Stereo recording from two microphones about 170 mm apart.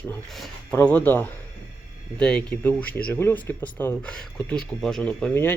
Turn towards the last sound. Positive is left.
turn(degrees=10)  # may be behind; listen again after turning